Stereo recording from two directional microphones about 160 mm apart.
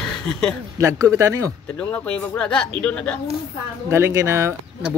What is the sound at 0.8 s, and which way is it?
Speech, 20° right (ahead or behind).